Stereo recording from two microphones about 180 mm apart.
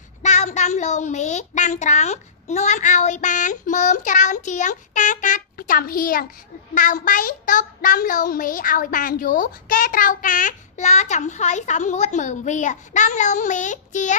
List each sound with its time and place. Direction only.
0.2 s a child's voice: 40° left (ahead or behind)